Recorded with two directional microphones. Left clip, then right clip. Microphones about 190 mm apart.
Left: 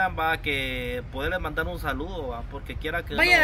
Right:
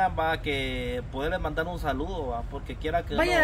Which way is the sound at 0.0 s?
20° right (ahead or behind).